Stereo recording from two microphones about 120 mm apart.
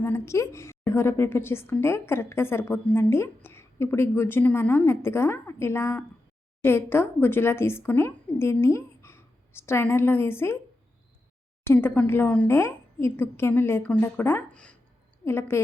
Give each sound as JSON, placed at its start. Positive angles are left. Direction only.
{"t": 0.0, "sound": "a woman's voice", "side_deg": 20}
{"t": 11.7, "sound": "a woman's voice", "side_deg": 20}
{"t": 14.5, "sound": "speech", "side_deg": 10}
{"t": 15.2, "sound": "a woman's voice", "side_deg": 20}